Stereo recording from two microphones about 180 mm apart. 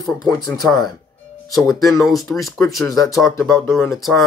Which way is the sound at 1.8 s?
Centre (ahead or behind).